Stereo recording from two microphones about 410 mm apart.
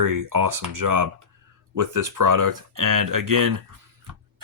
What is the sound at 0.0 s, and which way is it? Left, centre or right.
Speech, right.